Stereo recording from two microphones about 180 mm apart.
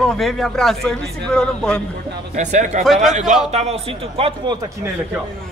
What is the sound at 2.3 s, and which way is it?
Speech, 40° right (ahead or behind).